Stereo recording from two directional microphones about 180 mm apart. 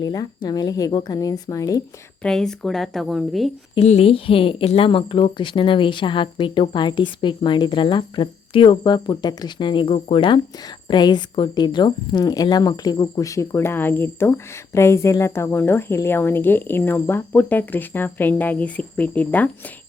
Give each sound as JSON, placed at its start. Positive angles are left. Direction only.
{"t": 0.0, "sound": "a woman's voice", "side_deg": 20}
{"t": 2.2, "sound": "speech", "side_deg": 5}
{"t": 3.8, "sound": "a woman's voice", "side_deg": 35}